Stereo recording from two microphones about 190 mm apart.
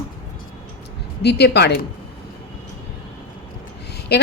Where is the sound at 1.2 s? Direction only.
60° left (ahead or behind).